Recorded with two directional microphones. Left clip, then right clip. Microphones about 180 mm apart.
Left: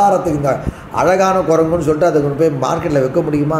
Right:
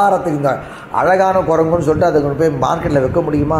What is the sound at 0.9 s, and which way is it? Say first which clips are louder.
A man's voice: even; 25° right (ahead or behind).